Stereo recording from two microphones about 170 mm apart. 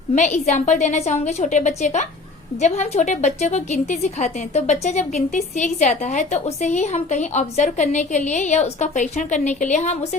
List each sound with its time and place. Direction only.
0.1 s a woman's voice: 45° left (ahead or behind)